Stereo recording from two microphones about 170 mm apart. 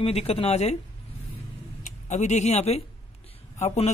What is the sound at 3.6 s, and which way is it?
Speech, 40° left (ahead or behind).